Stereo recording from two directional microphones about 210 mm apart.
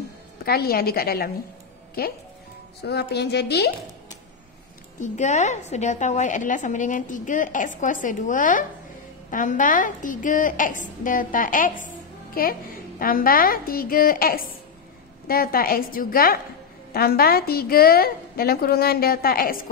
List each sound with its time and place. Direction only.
0.5 s a woman's voice: 45° left (ahead or behind)
2.8 s a woman's voice: 50° left (ahead or behind)
5.0 s a woman's voice: 35° left (ahead or behind)